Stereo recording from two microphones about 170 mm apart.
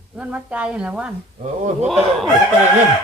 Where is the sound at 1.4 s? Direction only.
40° right (ahead or behind).